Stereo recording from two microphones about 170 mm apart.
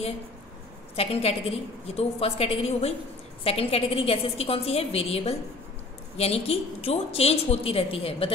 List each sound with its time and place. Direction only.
0.9 s a woman's voice: 35° left (ahead or behind)